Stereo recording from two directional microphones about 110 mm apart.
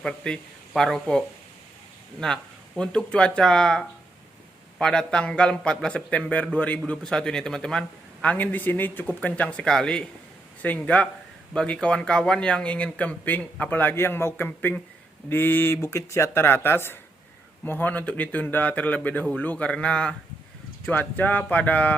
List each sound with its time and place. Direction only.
0.0 s speech: 5° left (ahead or behind)
2.2 s a man's voice: 5° left (ahead or behind)